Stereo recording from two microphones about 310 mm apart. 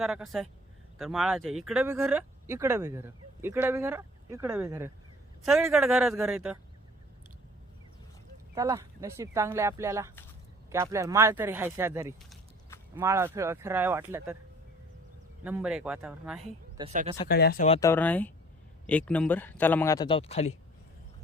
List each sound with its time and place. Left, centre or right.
0.0 s a man's voice: centre
8.5 s speech: centre
15.4 s a man's voice: centre
16.7 s speech: right
17.2 s speech: left
17.7 s a man's voice: centre